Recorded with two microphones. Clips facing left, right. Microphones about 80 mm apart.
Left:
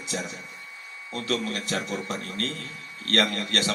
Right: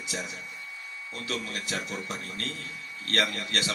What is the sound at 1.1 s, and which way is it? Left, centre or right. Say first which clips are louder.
A man's voice: left 6 dB; left.